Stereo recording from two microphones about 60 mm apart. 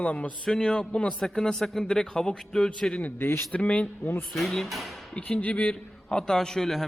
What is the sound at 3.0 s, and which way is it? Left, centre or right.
Speech, left.